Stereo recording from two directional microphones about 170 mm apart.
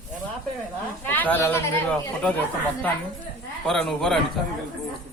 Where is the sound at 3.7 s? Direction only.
5° left (ahead or behind).